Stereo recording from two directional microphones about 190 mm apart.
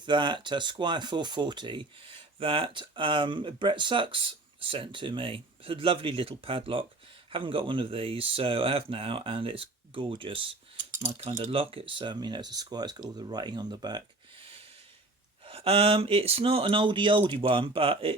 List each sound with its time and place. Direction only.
0.0 s speech: 25° right (ahead or behind)
15.4 s speech: 30° right (ahead or behind)